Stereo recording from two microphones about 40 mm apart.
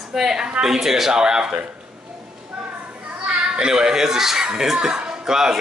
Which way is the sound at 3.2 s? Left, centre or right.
Right.